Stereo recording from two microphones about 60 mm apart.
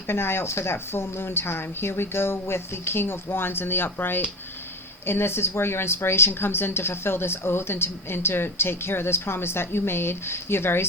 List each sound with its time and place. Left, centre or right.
0.1 s speech: left